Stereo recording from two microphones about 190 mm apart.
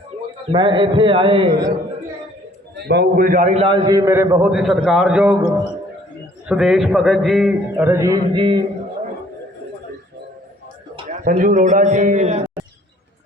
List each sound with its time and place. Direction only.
0.5 s a man's voice: 25° right (ahead or behind)
2.8 s a man's voice: 60° right (ahead or behind); by 5.5 s 5° right (ahead or behind)
6.5 s a man's voice: centre (ahead or behind); by 8.6 s 25° right (ahead or behind)
11.1 s a man's voice: 45° right (ahead or behind)